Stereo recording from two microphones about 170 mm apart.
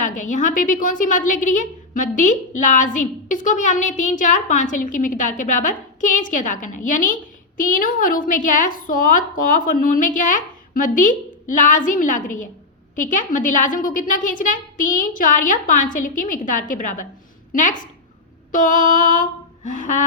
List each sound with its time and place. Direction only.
0.0 s a woman's voice: 50° left (ahead or behind)